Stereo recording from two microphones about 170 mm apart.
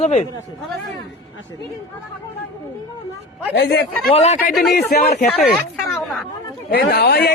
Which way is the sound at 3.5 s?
75° left (ahead or behind).